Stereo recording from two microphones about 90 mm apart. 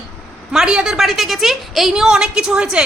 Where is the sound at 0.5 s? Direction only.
10° right (ahead or behind).